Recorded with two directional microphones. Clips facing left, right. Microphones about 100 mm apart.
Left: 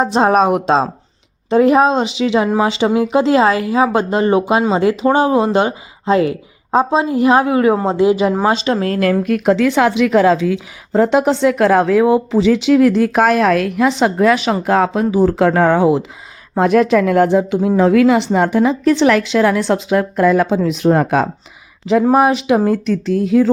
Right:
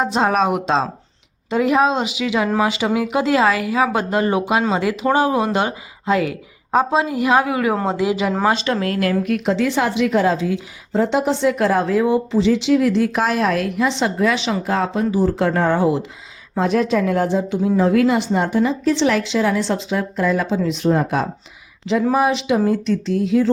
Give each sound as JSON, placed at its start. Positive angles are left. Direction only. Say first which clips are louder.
{"t": 0.0, "sound": "speech", "louder": "left 5 dB", "side_deg": 40}
{"t": 9.6, "sound": "a woman's voice", "louder": "left 5 dB", "side_deg": 65}
{"t": 10.0, "sound": "a woman's voice", "louder": "left 4 dB", "side_deg": 85}
{"t": 13.8, "sound": "a woman's voice", "louder": "left 6 dB", "side_deg": 55}
{"t": 16.6, "sound": "speech", "louder": "left 6 dB", "side_deg": 60}
{"t": 17.7, "sound": "speech", "louder": "left 5 dB", "side_deg": 85}
{"t": 22.1, "sound": "speech", "louder": "left 4 dB", "side_deg": 50}